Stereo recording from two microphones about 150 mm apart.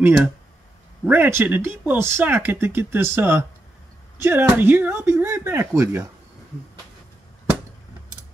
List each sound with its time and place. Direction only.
1.0 s speech: 10° right (ahead or behind)